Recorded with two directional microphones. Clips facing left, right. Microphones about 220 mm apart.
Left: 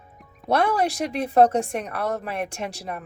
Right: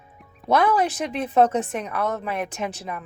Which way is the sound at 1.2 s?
35° left (ahead or behind).